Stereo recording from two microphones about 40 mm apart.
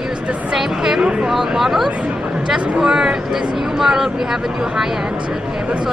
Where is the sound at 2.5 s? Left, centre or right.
Centre.